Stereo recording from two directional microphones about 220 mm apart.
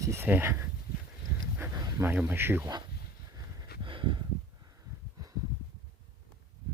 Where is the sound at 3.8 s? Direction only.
20° right (ahead or behind).